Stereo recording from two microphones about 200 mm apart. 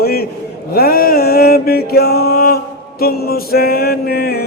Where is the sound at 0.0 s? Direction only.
50° left (ahead or behind).